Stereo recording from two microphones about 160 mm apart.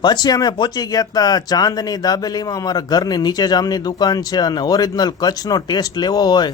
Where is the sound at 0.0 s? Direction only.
25° left (ahead or behind).